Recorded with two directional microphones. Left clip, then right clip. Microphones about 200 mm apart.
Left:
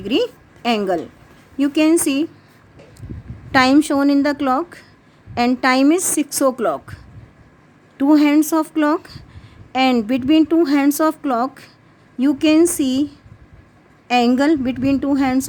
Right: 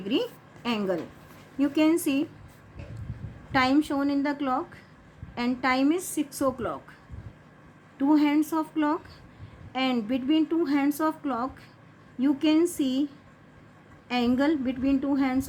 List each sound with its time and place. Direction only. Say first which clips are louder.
0.1 s a woman's voice: left 9 dB; 55° left (ahead or behind)
3.5 s a woman's voice: left 10 dB; 55° left (ahead or behind)